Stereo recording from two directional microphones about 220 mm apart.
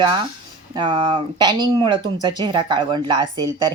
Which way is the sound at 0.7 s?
20° right (ahead or behind).